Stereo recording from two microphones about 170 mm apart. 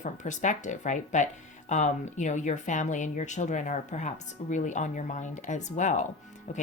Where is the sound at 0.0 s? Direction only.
45° left (ahead or behind).